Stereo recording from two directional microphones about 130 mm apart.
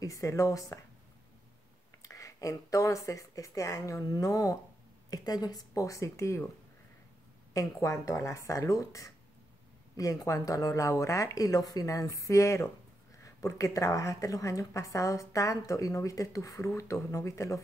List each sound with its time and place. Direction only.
0.0 s speech: 25° left (ahead or behind)
2.0 s speech: 25° left (ahead or behind)
7.5 s speech: 25° left (ahead or behind)